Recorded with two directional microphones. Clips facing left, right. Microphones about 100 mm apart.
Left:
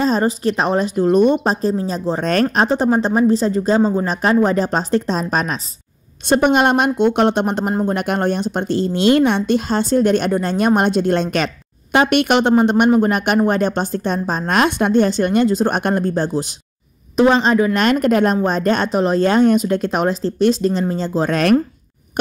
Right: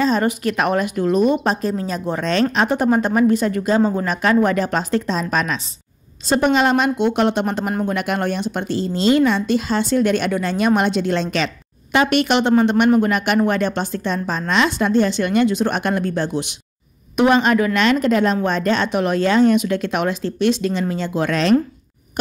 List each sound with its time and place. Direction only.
0.0 s a woman's voice: 35° left (ahead or behind)
1.1 s speech: centre (ahead or behind)
1.4 s a woman's voice: 35° left (ahead or behind)
6.2 s a woman's voice: 55° left (ahead or behind)
14.5 s speech: 50° left (ahead or behind); by 17.6 s 30° left (ahead or behind)
17.7 s a woman's voice: 50° left (ahead or behind)